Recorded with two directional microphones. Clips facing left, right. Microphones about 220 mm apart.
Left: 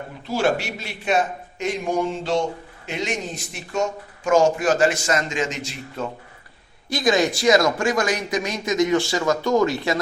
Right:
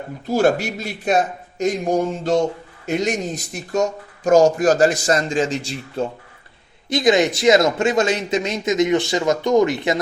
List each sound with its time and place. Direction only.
0.3 s speech: 40° right (ahead or behind)
6.9 s speech: 20° right (ahead or behind)